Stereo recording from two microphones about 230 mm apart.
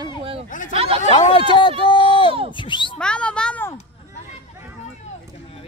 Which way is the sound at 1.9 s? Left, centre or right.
Centre.